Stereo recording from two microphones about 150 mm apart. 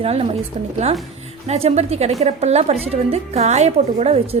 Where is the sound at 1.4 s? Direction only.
45° right (ahead or behind).